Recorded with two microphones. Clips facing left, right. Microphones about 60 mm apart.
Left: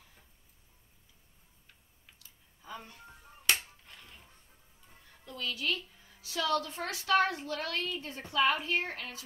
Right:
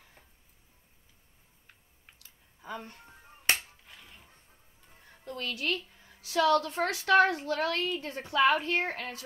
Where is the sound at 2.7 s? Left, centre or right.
Right.